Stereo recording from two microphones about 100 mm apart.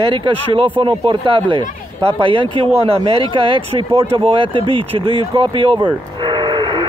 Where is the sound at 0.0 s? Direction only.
55° right (ahead or behind); by 3.0 s 80° right.